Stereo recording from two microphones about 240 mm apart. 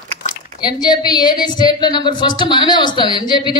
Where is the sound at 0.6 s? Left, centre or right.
Centre.